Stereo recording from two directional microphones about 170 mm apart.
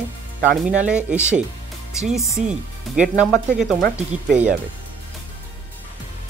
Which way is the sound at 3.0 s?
5° right (ahead or behind).